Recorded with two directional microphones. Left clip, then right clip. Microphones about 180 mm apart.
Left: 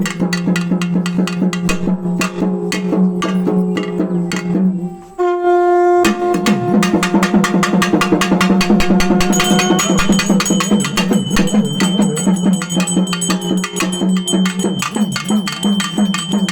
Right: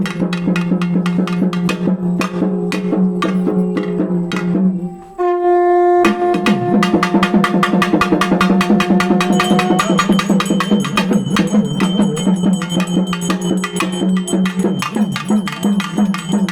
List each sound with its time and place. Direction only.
5.2 s wind instrument: 5° left (ahead or behind)
7.1 s drum: 35° left (ahead or behind)
9.7 s music: 25° left (ahead or behind)